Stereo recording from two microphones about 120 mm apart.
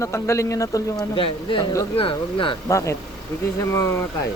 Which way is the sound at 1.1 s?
45° left (ahead or behind).